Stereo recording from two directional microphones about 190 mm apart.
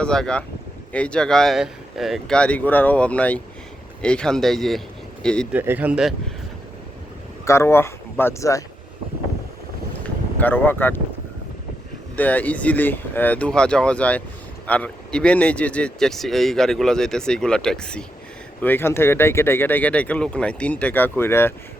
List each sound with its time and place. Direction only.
0.0 s speech: 5° left (ahead or behind)
5.5 s speech: 10° right (ahead or behind)
7.4 s speech: 15° left (ahead or behind)
10.4 s speech: 10° left (ahead or behind)
12.1 s speech: 10° left (ahead or behind)